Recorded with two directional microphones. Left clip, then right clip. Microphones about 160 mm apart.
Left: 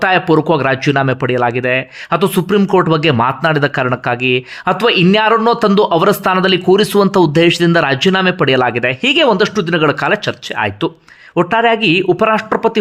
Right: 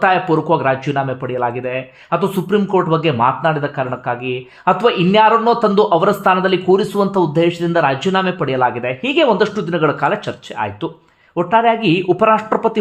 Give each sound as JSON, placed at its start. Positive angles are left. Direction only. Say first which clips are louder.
{"t": 0.0, "sound": "speech", "louder": "left 2 dB", "side_deg": 20}